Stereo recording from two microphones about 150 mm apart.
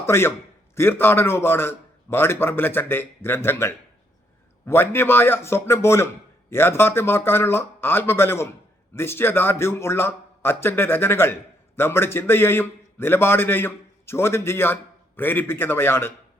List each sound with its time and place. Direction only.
0.0 s a man's voice: 15° left (ahead or behind)